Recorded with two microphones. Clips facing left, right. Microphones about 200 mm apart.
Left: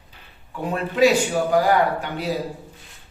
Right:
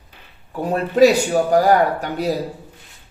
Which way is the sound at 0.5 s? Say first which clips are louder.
Right 5 dB; 40° right (ahead or behind).